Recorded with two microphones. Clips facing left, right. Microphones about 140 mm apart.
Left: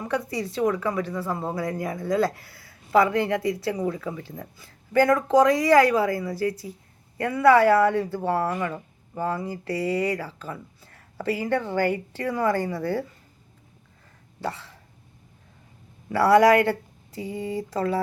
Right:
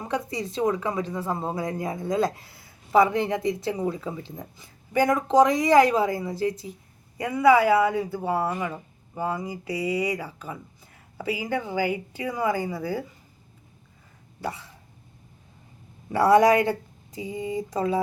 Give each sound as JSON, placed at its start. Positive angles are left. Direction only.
{"t": 0.0, "sound": "speech", "side_deg": -25}
{"t": 14.4, "sound": "speech", "side_deg": -15}
{"t": 16.0, "sound": "speech", "side_deg": -20}